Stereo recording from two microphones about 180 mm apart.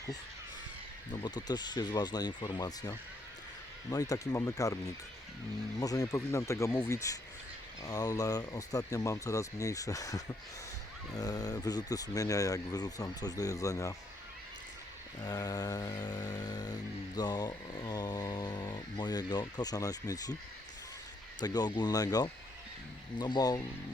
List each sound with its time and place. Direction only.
1.1 s speech: 25° left (ahead or behind)
15.2 s speech: 20° left (ahead or behind)
17.2 s a sound: 25° left (ahead or behind)
21.4 s speech: 20° left (ahead or behind)